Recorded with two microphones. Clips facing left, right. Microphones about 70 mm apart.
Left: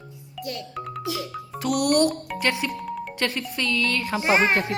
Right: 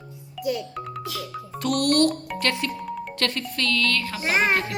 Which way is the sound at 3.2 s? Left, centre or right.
Centre.